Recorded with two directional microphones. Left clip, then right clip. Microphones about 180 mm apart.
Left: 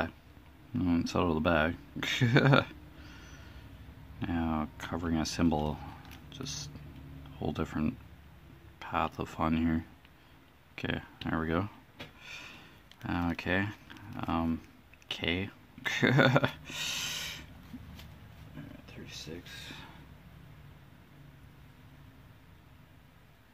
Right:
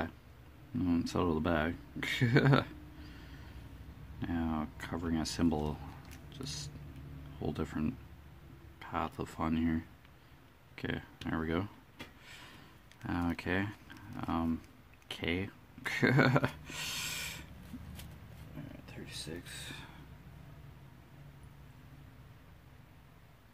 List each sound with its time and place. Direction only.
0.7 s speech: 15° left (ahead or behind)
4.2 s speech: 15° left (ahead or behind)
13.0 s speech: 10° left (ahead or behind)
19.2 s speech: centre (ahead or behind)